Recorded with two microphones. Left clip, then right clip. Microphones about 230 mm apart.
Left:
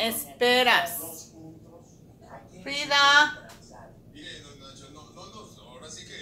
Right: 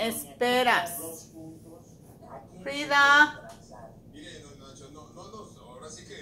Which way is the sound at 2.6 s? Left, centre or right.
Right.